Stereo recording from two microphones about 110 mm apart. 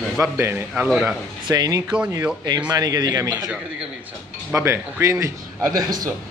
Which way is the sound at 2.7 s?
35° right (ahead or behind).